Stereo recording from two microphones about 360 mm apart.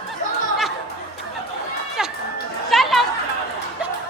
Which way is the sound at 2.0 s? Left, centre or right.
Centre.